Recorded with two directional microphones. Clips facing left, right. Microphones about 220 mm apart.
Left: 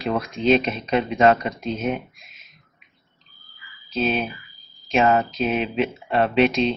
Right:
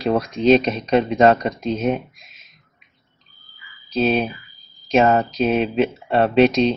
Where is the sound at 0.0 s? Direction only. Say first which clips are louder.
Right 4 dB; 40° right (ahead or behind).